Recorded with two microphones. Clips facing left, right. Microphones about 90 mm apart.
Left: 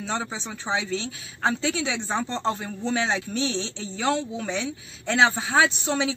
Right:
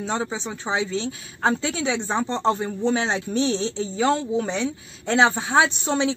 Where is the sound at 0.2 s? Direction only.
30° right (ahead or behind).